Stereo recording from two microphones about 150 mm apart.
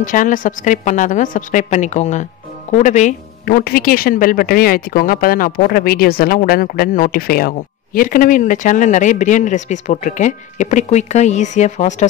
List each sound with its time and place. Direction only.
0.0 s a woman's voice: 60° left (ahead or behind)
3.4 s speech: 80° left; by 12.1 s 50° left (ahead or behind)